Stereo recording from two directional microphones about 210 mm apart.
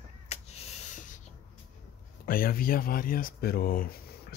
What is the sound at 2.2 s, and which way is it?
Speech, 45° left (ahead or behind).